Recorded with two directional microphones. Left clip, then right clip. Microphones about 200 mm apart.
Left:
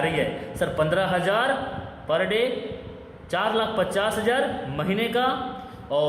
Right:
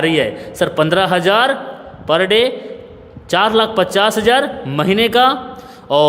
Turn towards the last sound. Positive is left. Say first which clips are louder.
# right 11 dB
turn(degrees=-50)  # may be behind; listen again after turning